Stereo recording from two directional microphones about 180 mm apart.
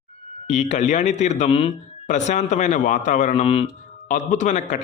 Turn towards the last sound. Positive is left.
turn(degrees=40)  # may be behind; listen again after turning